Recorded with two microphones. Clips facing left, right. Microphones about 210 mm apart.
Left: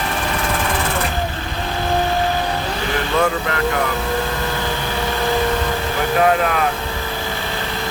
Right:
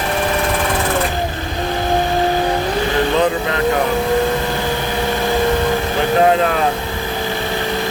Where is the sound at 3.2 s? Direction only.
20° right (ahead or behind).